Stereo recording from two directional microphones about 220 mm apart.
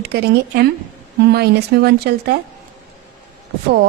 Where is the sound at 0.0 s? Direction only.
45° right (ahead or behind).